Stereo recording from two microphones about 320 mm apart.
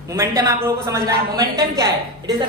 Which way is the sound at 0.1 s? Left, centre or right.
Centre.